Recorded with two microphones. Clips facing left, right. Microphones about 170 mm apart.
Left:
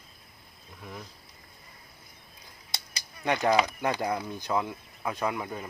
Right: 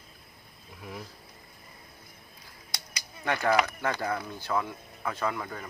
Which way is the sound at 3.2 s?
15° left (ahead or behind).